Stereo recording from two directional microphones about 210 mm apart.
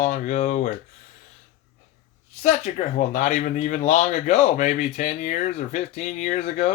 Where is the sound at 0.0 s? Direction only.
35° left (ahead or behind).